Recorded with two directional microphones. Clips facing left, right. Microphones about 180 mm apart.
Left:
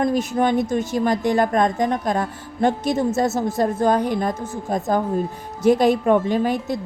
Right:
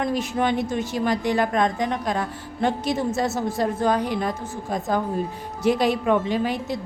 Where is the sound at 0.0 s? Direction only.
45° left (ahead or behind).